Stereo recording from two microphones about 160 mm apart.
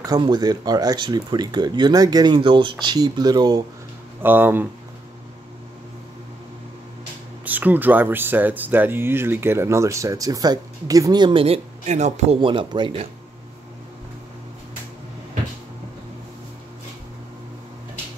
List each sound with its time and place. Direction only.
0.0 s speech: 25° right (ahead or behind)
4.2 s speech: 15° right (ahead or behind)
7.4 s speech: 10° right (ahead or behind); by 13.1 s 30° right (ahead or behind)